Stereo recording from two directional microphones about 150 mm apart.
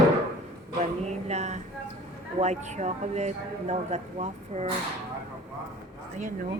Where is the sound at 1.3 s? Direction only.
50° right (ahead or behind).